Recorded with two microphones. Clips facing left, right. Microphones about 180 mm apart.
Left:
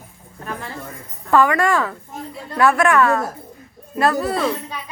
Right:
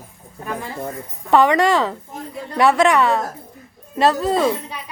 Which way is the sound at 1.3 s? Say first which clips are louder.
Right 2 dB; 20° right (ahead or behind).